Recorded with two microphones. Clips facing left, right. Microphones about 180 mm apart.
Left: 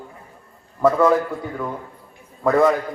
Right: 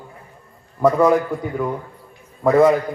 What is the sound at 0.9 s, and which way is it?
Speech, 15° right (ahead or behind).